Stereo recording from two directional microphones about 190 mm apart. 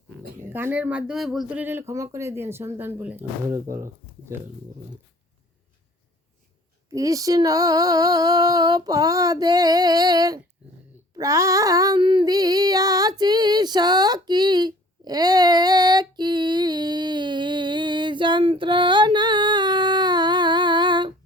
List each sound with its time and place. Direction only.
0.3 s speech: 10° right (ahead or behind)
6.9 s female singing: 15° right (ahead or behind)